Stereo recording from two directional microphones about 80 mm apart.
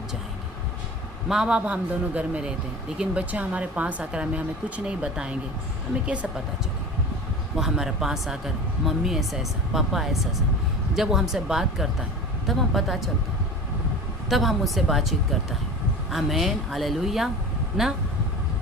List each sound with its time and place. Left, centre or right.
1.3 s speech: centre
7.5 s speech: centre
14.3 s speech: centre